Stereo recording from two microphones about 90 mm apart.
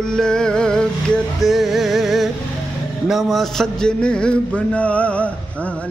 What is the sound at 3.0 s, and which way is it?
A man's voice, centre (ahead or behind).